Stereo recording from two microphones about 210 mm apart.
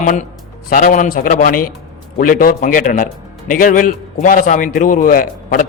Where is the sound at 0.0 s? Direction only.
40° left (ahead or behind).